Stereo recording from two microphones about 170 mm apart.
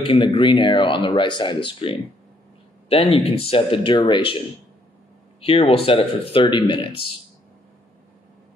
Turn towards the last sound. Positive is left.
turn(degrees=30)  # may be behind; listen again after turning